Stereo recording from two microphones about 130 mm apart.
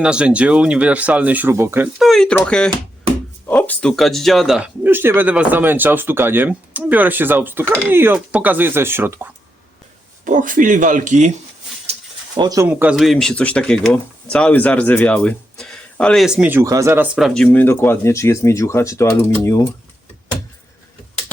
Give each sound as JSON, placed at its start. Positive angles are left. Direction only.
{"t": 0.0, "sound": "speech", "side_deg": -10}
{"t": 2.0, "sound": "speech", "side_deg": 0}
{"t": 4.8, "sound": "speech", "side_deg": -15}
{"t": 10.2, "sound": "speech", "side_deg": -85}
{"t": 12.4, "sound": "speech", "side_deg": -30}
{"t": 12.6, "sound": "speech", "side_deg": -15}
{"t": 13.0, "sound": "speech", "side_deg": 0}
{"t": 16.2, "sound": "speech", "side_deg": -5}
{"t": 16.5, "sound": "speech", "side_deg": -20}
{"t": 17.2, "sound": "speech", "side_deg": 0}